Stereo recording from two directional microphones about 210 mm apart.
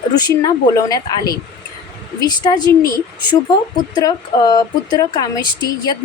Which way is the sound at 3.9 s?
20° left (ahead or behind).